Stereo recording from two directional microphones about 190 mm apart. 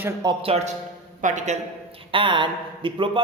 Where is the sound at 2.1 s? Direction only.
25° right (ahead or behind).